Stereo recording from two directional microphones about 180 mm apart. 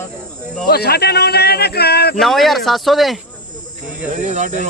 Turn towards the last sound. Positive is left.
turn(degrees=-45)  # may be behind; listen again after turning